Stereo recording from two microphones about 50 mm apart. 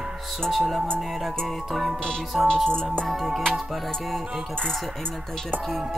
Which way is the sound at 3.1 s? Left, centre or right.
Centre.